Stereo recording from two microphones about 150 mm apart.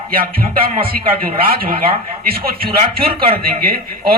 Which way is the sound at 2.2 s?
90° right.